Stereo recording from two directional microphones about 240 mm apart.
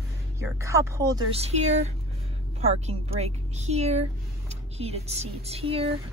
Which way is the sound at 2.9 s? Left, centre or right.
Right.